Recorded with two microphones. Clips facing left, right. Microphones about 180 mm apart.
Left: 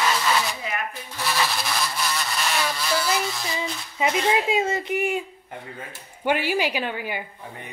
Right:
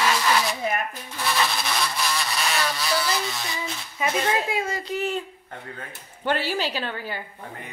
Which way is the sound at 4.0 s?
20° left (ahead or behind).